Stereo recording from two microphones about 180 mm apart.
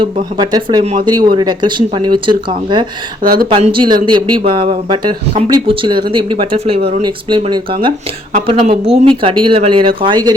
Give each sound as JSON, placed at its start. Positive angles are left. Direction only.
{"t": 0.0, "sound": "speech", "side_deg": -20}
{"t": 3.2, "sound": "speech", "side_deg": -55}
{"t": 3.5, "sound": "a woman's voice", "side_deg": -30}